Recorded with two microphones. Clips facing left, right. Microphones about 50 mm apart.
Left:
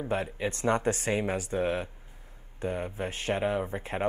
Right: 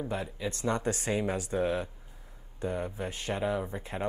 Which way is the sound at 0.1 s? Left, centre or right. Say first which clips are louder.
Left 4 dB; left.